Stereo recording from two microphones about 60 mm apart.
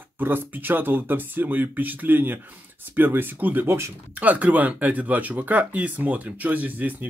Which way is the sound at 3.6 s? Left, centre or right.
Right.